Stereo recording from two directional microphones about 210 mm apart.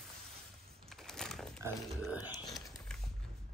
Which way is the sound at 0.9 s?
Centre (ahead or behind).